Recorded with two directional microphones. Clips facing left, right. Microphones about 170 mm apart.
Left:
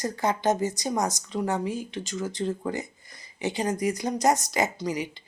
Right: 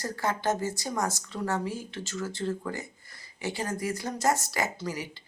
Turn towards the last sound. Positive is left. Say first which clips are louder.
# left 5 dB
turn(degrees=15)  # may be behind; listen again after turning